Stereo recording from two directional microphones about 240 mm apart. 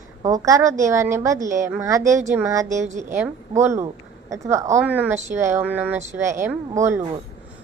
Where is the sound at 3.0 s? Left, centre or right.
Centre.